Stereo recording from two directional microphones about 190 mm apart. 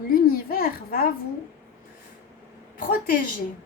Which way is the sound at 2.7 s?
45° left (ahead or behind).